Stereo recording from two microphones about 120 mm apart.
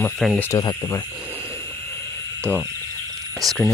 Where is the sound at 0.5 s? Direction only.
25° left (ahead or behind).